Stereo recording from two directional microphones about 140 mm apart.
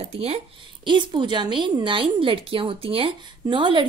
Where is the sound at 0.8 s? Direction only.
35° right (ahead or behind).